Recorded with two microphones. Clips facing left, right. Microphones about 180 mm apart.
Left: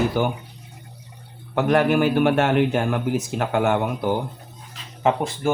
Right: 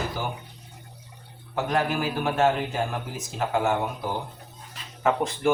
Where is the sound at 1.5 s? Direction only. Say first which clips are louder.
Left 7 dB; 65° left (ahead or behind).